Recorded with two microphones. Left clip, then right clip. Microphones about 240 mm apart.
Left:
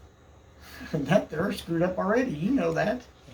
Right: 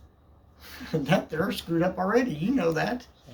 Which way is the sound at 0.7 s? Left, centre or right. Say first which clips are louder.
Left 1 dB; right.